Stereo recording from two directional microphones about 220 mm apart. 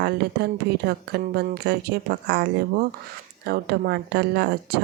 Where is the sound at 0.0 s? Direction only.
50° right (ahead or behind).